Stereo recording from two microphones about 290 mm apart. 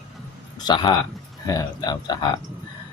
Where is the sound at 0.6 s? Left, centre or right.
Centre.